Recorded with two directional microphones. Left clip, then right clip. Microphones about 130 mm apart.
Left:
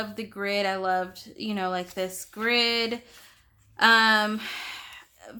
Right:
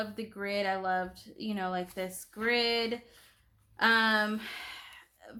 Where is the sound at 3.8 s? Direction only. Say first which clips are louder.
Left 7 dB; 25° left (ahead or behind).